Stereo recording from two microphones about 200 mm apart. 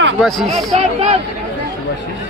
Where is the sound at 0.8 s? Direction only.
30° right (ahead or behind).